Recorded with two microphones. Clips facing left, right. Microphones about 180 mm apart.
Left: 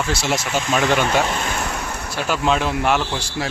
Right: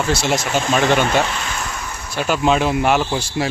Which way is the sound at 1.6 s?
65° left (ahead or behind).